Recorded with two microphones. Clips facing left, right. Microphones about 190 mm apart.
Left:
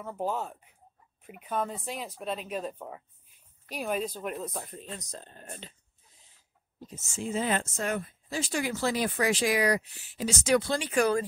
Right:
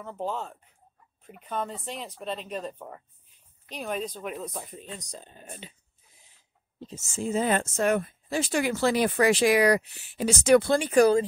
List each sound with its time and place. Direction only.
0.0 s speech: 5° left (ahead or behind)
7.2 s speech: 45° right (ahead or behind)
7.7 s speech: 65° right (ahead or behind); by 11.1 s 40° right (ahead or behind)